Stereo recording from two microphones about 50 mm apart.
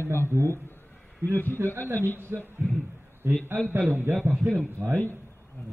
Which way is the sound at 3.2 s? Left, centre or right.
Right.